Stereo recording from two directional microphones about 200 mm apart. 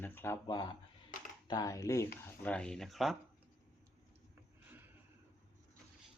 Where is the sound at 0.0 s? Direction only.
10° left (ahead or behind).